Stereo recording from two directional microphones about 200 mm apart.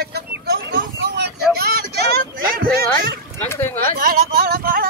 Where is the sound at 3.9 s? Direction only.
45° right (ahead or behind).